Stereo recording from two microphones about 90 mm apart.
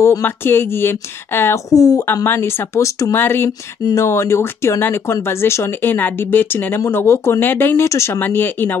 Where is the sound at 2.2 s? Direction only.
25° left (ahead or behind).